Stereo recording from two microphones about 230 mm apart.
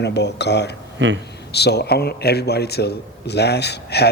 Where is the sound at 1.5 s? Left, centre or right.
Left.